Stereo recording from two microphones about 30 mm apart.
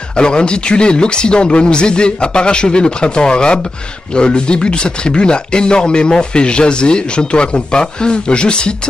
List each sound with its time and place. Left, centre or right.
0.1 s speech: left